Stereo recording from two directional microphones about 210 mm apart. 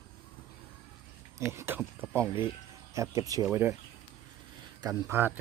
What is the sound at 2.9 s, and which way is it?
Speech, 15° right (ahead or behind).